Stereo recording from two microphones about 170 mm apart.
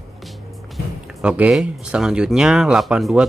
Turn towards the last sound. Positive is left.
turn(degrees=-5)  # may be behind; listen again after turning